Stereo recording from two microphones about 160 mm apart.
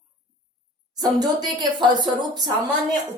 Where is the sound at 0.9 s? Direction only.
25° right (ahead or behind).